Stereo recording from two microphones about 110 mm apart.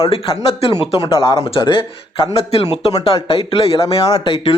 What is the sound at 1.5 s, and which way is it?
Speech, 50° left (ahead or behind).